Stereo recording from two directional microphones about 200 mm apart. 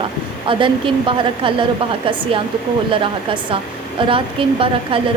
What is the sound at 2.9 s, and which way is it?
A woman's voice, 25° right (ahead or behind).